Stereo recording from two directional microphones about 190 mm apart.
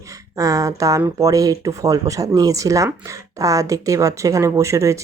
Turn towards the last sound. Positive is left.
turn(degrees=-15)  # may be behind; listen again after turning